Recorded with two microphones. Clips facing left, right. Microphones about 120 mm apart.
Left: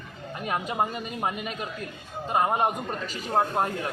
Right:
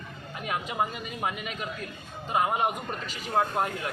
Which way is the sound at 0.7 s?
30° left (ahead or behind).